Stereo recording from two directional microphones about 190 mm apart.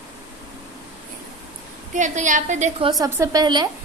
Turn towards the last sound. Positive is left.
turn(degrees=-20)  # may be behind; listen again after turning